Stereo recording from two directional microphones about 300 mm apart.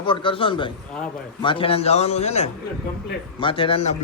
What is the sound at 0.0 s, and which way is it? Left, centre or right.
A man's voice, centre.